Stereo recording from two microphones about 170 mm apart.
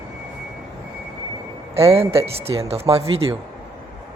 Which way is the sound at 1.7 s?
35° right (ahead or behind).